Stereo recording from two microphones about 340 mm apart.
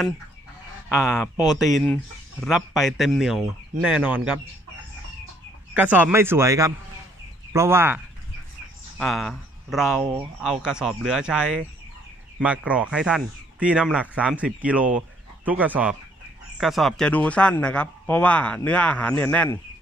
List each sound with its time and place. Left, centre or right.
1.0 s speech: centre
5.8 s speech: centre